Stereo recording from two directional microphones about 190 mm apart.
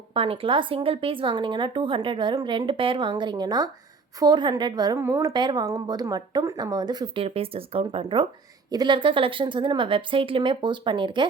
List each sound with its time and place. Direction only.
0.1 s a woman's voice: 30° right (ahead or behind)